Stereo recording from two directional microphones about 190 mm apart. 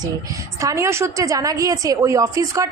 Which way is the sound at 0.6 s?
15° right (ahead or behind).